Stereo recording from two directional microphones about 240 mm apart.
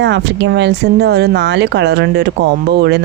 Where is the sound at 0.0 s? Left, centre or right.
Right.